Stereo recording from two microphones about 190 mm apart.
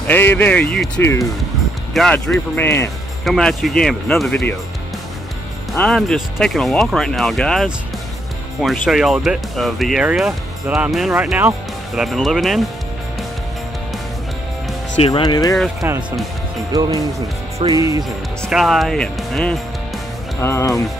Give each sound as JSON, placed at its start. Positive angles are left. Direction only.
{"t": 0.0, "sound": "speech", "side_deg": 10}
{"t": 5.7, "sound": "speech", "side_deg": 0}
{"t": 15.0, "sound": "speech", "side_deg": 30}
{"t": 16.7, "sound": "speech", "side_deg": -20}
{"t": 18.4, "sound": "speech", "side_deg": 0}
{"t": 20.3, "sound": "speech", "side_deg": 15}